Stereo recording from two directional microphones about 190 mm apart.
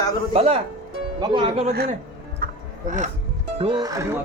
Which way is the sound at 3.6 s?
25° right (ahead or behind).